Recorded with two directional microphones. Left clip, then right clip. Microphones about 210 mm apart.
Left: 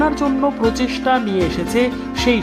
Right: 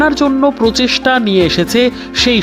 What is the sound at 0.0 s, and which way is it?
Speech, 20° right (ahead or behind).